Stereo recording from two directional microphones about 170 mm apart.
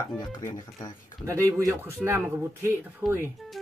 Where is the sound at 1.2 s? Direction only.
15° right (ahead or behind).